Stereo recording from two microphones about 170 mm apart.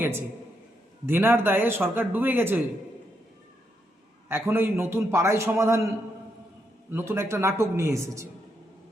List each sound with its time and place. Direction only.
1.0 s speech: 10° right (ahead or behind)
4.3 s speech: 15° right (ahead or behind)
6.9 s speech: 15° right (ahead or behind)